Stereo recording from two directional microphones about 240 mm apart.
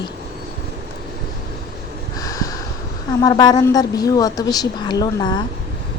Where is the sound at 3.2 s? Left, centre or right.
Centre.